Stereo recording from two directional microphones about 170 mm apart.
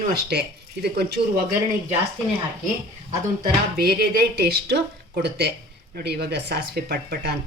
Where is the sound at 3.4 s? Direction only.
65° right (ahead or behind).